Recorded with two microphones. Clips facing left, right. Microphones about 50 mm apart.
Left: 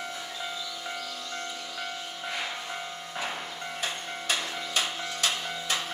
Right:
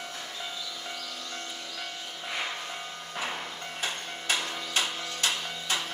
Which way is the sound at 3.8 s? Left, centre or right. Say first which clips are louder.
Right 1 dB; right.